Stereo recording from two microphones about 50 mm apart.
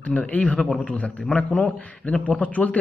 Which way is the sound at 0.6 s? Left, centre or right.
Centre.